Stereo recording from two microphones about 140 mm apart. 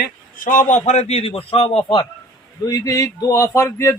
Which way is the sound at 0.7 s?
50° left (ahead or behind).